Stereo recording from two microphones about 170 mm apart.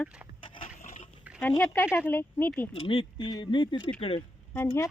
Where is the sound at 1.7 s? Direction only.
15° left (ahead or behind).